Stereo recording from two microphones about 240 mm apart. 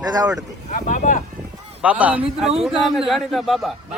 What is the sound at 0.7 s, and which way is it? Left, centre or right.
Speech, left.